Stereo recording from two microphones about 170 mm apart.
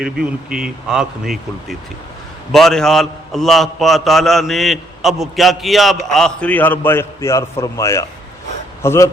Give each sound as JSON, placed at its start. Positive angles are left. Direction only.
{"t": 0.0, "sound": "a man's voice", "side_deg": -5}
{"t": 2.5, "sound": "a man's voice", "side_deg": 0}